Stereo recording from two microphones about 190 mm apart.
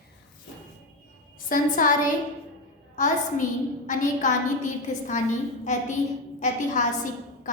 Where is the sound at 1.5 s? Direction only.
45° left (ahead or behind).